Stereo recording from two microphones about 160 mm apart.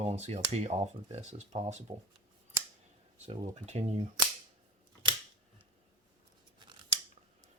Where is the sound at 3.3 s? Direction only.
40° right (ahead or behind).